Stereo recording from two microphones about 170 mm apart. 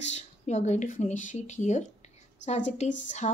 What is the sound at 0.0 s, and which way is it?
A woman's voice, 40° left (ahead or behind).